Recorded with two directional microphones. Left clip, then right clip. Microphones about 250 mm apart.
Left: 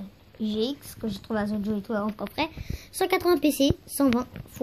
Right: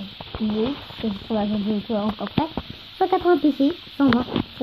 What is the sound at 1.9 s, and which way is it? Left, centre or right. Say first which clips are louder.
A woman's voice: right 3 dB; left.